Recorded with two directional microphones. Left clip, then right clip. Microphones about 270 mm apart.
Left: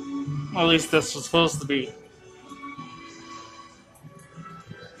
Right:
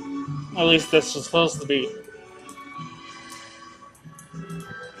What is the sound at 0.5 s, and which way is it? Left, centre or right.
A man's voice, centre.